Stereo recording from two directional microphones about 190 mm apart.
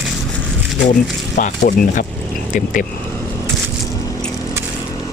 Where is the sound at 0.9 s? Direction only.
45° left (ahead or behind).